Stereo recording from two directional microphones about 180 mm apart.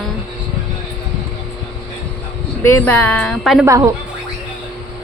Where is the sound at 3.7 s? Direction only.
15° right (ahead or behind).